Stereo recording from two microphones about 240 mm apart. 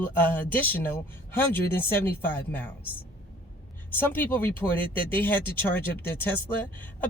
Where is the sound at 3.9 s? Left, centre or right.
Centre.